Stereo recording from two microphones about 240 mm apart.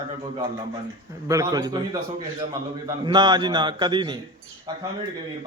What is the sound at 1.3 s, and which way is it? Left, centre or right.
A man's voice, centre.